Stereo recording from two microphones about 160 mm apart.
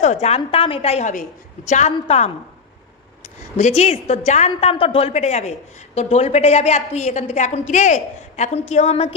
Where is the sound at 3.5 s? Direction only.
40° left (ahead or behind).